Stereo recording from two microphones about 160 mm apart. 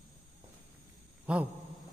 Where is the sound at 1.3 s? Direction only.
5° right (ahead or behind).